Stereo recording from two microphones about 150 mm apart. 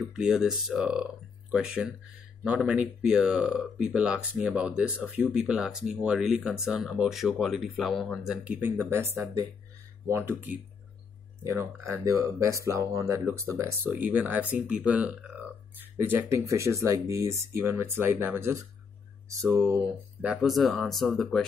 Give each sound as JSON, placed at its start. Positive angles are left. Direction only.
{"t": 0.0, "sound": "speech", "side_deg": -5}
{"t": 20.4, "sound": "speech", "side_deg": 0}